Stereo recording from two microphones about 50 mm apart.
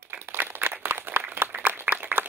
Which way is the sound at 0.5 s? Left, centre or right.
Right.